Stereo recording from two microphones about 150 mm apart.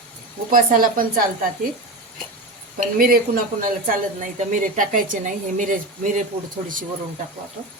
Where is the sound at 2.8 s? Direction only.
75° right (ahead or behind).